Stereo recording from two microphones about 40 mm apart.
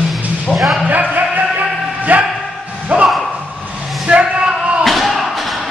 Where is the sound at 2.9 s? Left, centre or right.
Right.